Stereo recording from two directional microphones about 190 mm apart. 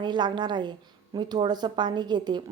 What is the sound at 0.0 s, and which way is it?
A woman's voice, 25° right (ahead or behind).